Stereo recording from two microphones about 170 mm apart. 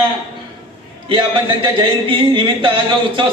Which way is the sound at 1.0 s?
30° right (ahead or behind).